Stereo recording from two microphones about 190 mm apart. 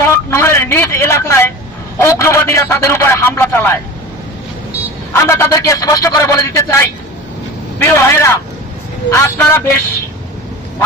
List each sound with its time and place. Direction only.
0.0 s vehicle: 15° left (ahead or behind)
2.0 s a man's voice: 15° left (ahead or behind)
5.1 s a man's voice: 15° left (ahead or behind)